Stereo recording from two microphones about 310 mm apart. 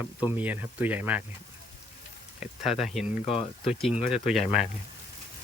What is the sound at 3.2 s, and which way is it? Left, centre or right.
Speech, centre.